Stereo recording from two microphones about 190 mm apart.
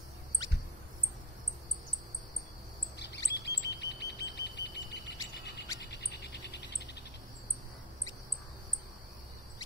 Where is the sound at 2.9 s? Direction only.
65° left (ahead or behind).